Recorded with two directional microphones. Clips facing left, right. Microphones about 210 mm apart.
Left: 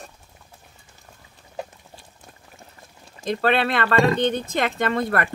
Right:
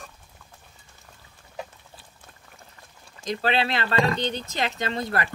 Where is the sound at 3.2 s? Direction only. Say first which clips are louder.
Left 4 dB; 55° left (ahead or behind).